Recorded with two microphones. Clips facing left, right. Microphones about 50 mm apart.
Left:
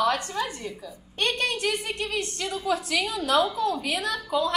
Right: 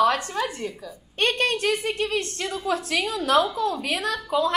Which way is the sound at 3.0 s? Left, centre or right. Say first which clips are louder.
Right 3 dB; right.